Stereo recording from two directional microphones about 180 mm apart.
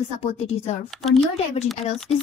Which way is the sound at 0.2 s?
35° left (ahead or behind).